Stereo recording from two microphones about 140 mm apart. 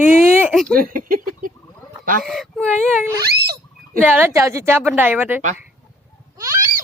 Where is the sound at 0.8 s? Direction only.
85° right.